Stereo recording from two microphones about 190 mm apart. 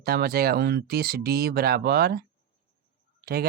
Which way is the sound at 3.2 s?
50° right (ahead or behind).